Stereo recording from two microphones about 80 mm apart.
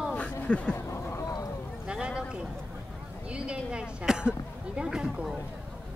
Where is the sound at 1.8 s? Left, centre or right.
Centre.